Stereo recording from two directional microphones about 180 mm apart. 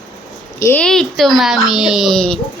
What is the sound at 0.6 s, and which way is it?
Speech, 15° left (ahead or behind).